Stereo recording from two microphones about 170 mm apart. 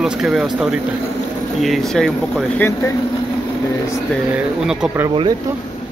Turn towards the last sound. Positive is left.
turn(degrees=-25)  # may be behind; listen again after turning